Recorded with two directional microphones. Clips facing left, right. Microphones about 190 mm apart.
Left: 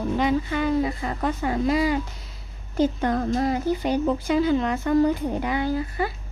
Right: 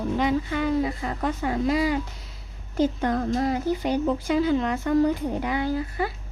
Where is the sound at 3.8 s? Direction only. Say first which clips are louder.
Left 1 dB; 30° left (ahead or behind).